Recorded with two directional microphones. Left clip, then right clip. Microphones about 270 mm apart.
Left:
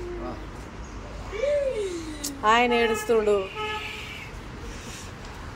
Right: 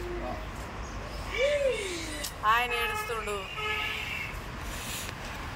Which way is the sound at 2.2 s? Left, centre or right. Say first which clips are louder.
Left 6 dB; left.